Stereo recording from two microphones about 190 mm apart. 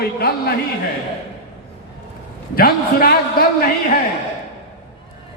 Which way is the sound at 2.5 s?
50° left (ahead or behind).